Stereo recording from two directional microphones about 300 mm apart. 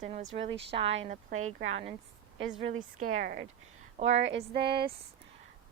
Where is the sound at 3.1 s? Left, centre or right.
Right.